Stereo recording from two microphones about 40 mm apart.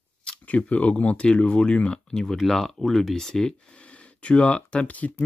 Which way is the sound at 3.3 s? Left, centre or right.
Centre.